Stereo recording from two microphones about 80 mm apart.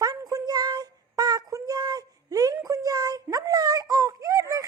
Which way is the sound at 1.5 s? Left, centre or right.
Right.